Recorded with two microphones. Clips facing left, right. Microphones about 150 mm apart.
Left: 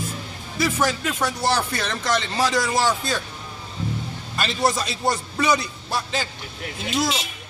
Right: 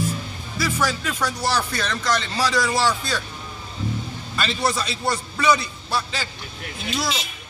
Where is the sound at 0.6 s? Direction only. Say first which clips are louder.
Left 2 dB; 20° left (ahead or behind).